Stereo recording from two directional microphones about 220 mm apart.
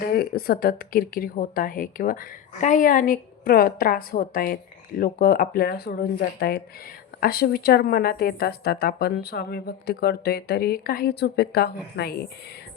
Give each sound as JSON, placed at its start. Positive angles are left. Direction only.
{"t": 0.0, "sound": "a woman's voice", "side_deg": 45}